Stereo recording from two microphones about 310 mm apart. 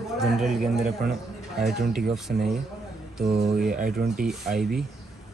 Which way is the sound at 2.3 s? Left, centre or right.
Right.